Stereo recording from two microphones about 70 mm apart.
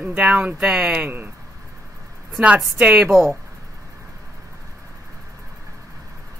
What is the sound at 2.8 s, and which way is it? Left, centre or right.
Speech, centre.